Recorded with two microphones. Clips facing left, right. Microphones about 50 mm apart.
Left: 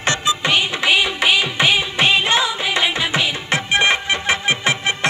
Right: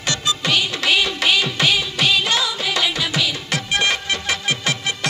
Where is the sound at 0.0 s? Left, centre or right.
Left.